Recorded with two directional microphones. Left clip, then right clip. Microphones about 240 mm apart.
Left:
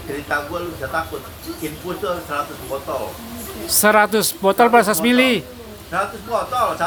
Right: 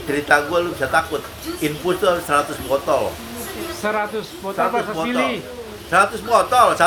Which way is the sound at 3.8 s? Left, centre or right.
Left.